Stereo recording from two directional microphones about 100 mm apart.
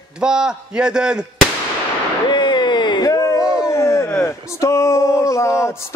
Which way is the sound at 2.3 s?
50° left (ahead or behind).